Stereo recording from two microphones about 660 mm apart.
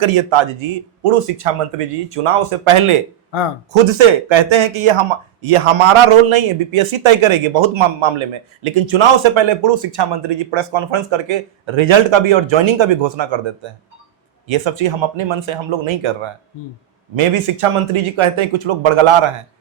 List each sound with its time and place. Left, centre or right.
0.0 s speech: right
14.4 s speech: right
17.2 s speech: right